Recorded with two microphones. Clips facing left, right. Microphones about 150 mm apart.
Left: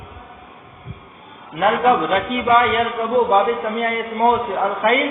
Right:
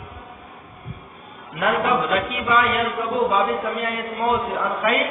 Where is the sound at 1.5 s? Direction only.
Centre (ahead or behind).